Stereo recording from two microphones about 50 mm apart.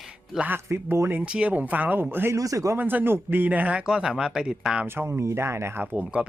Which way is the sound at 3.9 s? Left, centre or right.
Centre.